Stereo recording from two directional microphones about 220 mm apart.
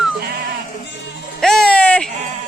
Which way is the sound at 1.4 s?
Centre (ahead or behind).